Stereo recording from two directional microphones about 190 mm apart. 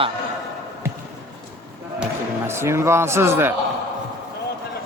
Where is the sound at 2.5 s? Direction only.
15° right (ahead or behind).